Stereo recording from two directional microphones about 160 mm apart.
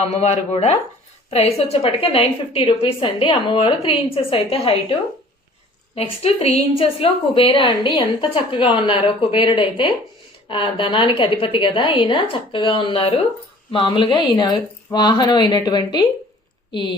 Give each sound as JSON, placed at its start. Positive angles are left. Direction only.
{"t": 0.1, "sound": "a woman's voice", "side_deg": 40}